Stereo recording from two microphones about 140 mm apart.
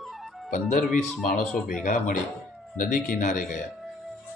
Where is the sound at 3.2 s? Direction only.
70° left (ahead or behind).